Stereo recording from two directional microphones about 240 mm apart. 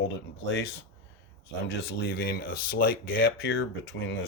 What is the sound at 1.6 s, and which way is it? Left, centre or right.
Speech, left.